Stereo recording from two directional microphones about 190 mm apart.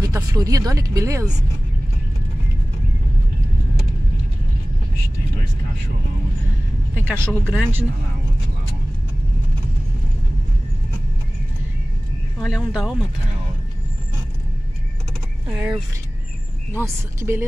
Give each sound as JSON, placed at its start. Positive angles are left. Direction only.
{"t": 0.0, "sound": "speech", "side_deg": -20}
{"t": 7.0, "sound": "speech", "side_deg": -10}
{"t": 12.4, "sound": "speech", "side_deg": 0}
{"t": 15.5, "sound": "speech", "side_deg": -5}